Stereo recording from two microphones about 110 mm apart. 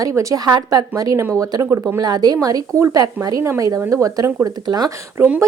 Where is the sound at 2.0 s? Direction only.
40° right (ahead or behind).